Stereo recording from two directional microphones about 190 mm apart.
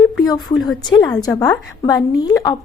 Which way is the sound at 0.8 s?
20° left (ahead or behind).